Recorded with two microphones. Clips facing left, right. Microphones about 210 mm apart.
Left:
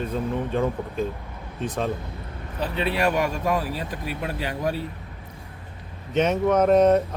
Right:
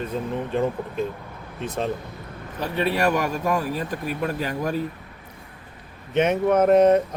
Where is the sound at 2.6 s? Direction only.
45° right (ahead or behind).